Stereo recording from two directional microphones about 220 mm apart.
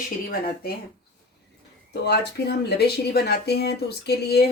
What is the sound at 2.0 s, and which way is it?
Speech, 50° left (ahead or behind).